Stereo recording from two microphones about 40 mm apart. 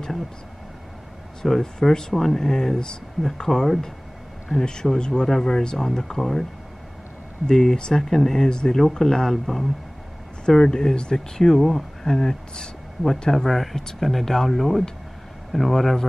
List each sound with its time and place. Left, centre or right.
1.4 s speech: centre
4.6 s speech: centre
7.4 s speech: centre
10.4 s speech: centre